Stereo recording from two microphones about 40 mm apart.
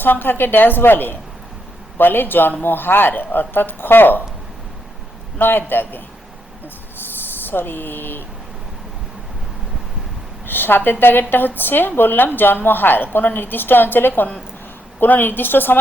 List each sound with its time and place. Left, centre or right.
0.0 s a woman's voice: left
5.4 s a woman's voice: left
7.4 s a woman's voice: left
10.4 s a woman's voice: left